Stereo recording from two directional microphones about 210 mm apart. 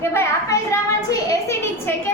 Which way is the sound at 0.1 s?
15° left (ahead or behind).